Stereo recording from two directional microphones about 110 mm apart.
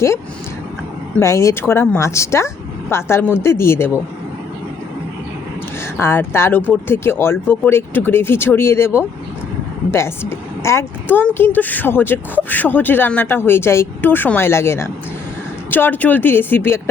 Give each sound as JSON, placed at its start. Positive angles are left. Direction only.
{"t": 1.2, "sound": "speech", "side_deg": 25}
{"t": 6.0, "sound": "speech", "side_deg": 20}